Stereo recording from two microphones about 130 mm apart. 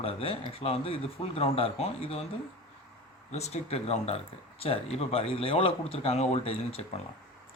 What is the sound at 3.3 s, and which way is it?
A man's voice, 55° left (ahead or behind).